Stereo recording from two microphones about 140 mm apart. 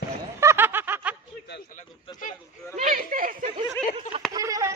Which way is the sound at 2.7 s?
65° right (ahead or behind).